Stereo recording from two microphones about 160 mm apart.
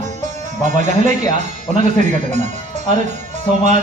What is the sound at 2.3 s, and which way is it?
Speech, 45° right (ahead or behind).